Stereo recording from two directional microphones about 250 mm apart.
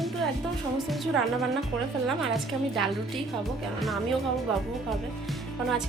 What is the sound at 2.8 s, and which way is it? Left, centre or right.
Speech, centre.